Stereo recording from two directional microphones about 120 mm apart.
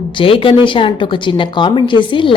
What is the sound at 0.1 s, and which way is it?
A woman's voice, 45° left (ahead or behind).